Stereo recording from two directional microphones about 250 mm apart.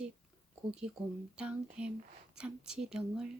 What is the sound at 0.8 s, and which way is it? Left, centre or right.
Speech, centre.